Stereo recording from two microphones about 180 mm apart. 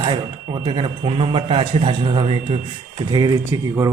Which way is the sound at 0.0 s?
25° right (ahead or behind).